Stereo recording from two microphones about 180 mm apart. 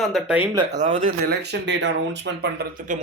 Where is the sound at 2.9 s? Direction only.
45° right (ahead or behind).